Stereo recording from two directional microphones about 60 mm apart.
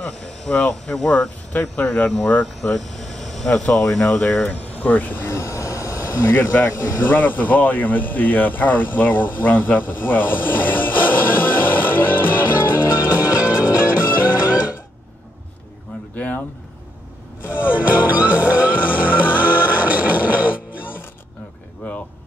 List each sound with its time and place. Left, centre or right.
0.0 s speech: centre
1.8 s speech: left
2.4 s speech: centre
4.5 s speech: left
5.2 s speech: left
13.2 s music: centre
17.5 s music: right